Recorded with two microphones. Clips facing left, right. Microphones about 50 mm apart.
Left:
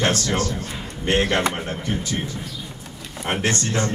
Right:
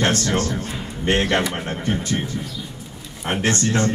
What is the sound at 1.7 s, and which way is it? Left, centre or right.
Speech, right.